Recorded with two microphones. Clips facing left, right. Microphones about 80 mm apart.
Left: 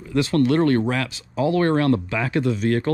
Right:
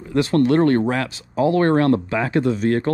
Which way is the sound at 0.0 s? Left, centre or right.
Right.